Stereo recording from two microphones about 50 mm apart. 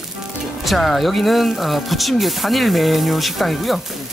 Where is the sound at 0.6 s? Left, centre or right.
Centre.